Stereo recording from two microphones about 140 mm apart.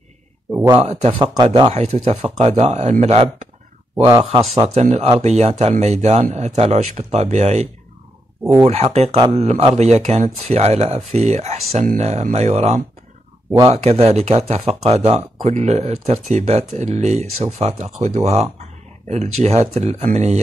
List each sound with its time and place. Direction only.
0.5 s speech: 20° right (ahead or behind)
0.7 s speech: 50° right (ahead or behind)
1.2 s speech: 30° right (ahead or behind)
1.7 s speech: 50° right (ahead or behind)
3.9 s speech: 20° right (ahead or behind)
4.6 s speech: 50° right (ahead or behind)
8.6 s speech: 45° right (ahead or behind)